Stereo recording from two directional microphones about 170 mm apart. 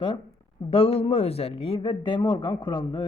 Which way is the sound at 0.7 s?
35° left (ahead or behind).